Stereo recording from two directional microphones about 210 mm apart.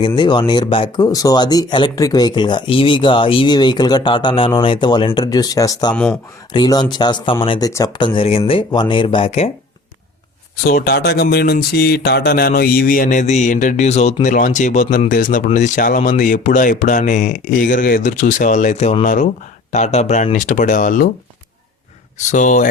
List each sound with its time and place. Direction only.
0.2 s speech: 20° left (ahead or behind)
10.7 s speech: 45° left (ahead or behind)
22.2 s speech: 35° left (ahead or behind)